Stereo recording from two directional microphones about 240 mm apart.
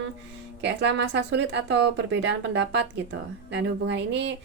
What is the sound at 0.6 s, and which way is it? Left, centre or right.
Speech, right.